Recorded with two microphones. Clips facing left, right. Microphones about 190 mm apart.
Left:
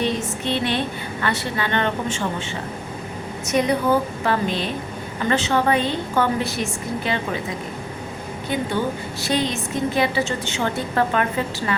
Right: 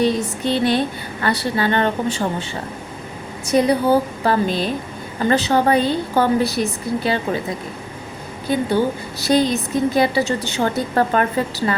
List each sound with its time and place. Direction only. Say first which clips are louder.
0.0 s a woman's voice: right 5 dB; 35° right (ahead or behind)
3.4 s a woman's voice: right 4 dB; 35° right (ahead or behind)
9.2 s a woman's voice: right 6 dB; 40° right (ahead or behind)